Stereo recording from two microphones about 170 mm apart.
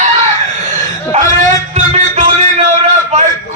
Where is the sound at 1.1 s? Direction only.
40° right (ahead or behind).